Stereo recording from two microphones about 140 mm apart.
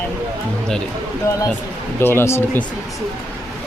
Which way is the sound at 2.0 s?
15° left (ahead or behind).